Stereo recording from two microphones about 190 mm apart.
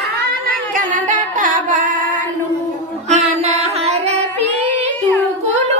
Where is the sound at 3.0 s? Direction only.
35° right (ahead or behind).